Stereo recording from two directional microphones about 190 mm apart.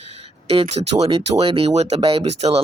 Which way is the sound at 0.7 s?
35° right (ahead or behind).